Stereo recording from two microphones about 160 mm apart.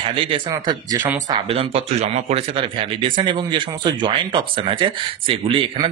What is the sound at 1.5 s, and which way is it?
Speech, 40° right (ahead or behind).